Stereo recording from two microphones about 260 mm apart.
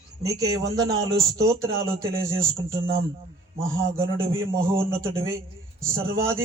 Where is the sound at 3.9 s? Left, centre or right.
Centre.